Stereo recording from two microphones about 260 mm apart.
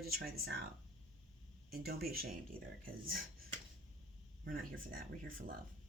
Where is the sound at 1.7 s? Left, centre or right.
Right.